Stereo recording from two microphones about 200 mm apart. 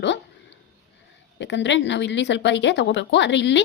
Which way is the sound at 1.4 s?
65° left (ahead or behind).